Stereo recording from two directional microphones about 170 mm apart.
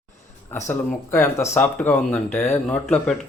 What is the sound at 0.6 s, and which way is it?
Speech, 15° left (ahead or behind).